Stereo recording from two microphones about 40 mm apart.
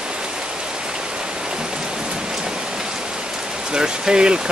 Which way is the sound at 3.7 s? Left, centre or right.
Right.